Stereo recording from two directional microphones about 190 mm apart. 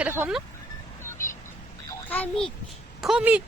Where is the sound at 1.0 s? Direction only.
15° left (ahead or behind).